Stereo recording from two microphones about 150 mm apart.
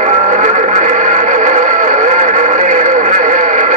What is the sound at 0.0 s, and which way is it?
Music, 50° right (ahead or behind).